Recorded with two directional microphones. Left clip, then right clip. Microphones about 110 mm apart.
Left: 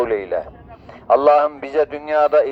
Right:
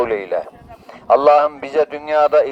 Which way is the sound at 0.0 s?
25° right (ahead or behind).